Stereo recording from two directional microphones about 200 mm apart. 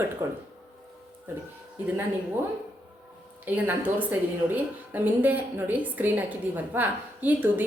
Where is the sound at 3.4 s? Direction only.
10° right (ahead or behind).